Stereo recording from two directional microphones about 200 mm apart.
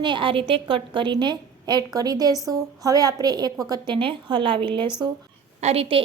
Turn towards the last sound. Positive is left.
turn(degrees=-30)  # may be behind; listen again after turning